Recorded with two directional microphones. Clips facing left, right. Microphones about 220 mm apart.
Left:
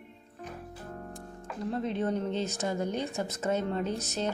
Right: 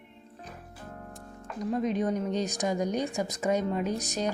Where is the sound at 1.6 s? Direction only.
15° right (ahead or behind).